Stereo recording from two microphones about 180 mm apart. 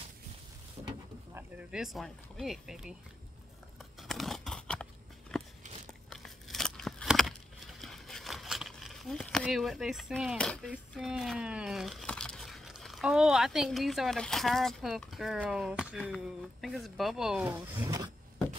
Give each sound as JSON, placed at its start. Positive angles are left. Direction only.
{"t": 1.3, "sound": "speech", "side_deg": -5}
{"t": 4.1, "sound": "a sound", "side_deg": 0}
{"t": 5.3, "sound": "biting", "side_deg": 5}
{"t": 6.0, "sound": "a sound", "side_deg": 0}
{"t": 10.7, "sound": "speech", "side_deg": 0}
{"t": 17.5, "sound": "speech", "side_deg": -15}